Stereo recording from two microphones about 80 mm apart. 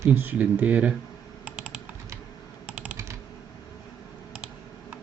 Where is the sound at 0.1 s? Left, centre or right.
Right.